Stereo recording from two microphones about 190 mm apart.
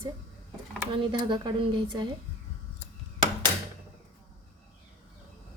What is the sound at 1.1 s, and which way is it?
Speech, 25° right (ahead or behind).